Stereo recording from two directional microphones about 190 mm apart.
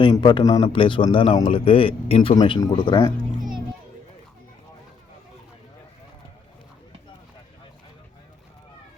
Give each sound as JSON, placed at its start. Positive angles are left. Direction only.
{"t": 0.0, "sound": "a man's voice", "side_deg": 25}